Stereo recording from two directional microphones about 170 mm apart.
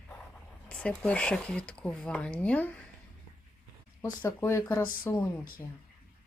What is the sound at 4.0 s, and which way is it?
Speech, 15° left (ahead or behind).